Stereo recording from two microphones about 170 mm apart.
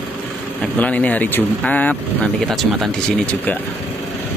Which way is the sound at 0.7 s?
10° left (ahead or behind).